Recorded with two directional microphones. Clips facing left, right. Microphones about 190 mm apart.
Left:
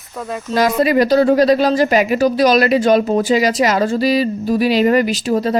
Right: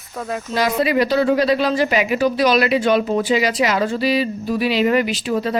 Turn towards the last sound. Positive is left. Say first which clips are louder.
# left 4 dB
turn(degrees=40)  # may be behind; listen again after turning